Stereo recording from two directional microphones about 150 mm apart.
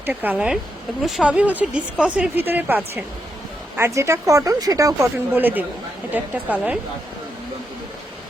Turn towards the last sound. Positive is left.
turn(degrees=-10)  # may be behind; listen again after turning